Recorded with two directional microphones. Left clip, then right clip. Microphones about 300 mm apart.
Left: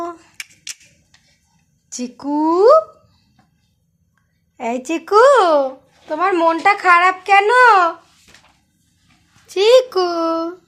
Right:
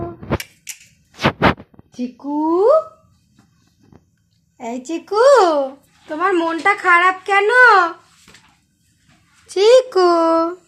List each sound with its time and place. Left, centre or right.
0.3 s cap gun: centre
2.1 s speech: left
4.5 s speech: centre
9.5 s a child's voice: centre